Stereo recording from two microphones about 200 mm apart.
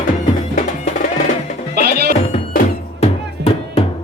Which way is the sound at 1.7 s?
50° right (ahead or behind).